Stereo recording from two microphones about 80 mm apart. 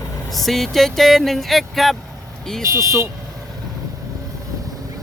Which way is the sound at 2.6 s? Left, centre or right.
Right.